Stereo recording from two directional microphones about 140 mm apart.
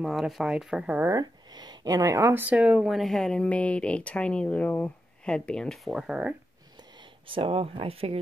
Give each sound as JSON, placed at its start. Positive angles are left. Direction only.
{"t": 0.0, "sound": "speech", "side_deg": 0}
{"t": 1.1, "sound": "speech", "side_deg": -30}
{"t": 7.2, "sound": "speech", "side_deg": -40}